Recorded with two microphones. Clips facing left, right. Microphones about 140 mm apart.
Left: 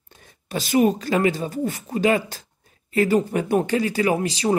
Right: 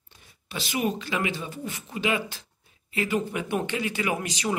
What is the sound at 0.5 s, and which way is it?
Speech, 40° left (ahead or behind).